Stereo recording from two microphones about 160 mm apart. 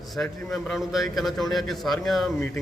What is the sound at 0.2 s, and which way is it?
A man's voice, 5° left (ahead or behind).